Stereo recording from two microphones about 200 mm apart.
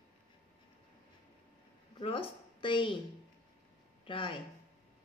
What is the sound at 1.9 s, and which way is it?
A woman's voice, 25° left (ahead or behind).